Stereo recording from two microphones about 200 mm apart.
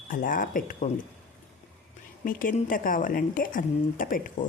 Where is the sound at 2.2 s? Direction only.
45° left (ahead or behind).